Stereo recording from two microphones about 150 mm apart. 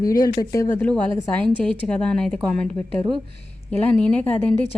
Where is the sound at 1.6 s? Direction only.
5° left (ahead or behind).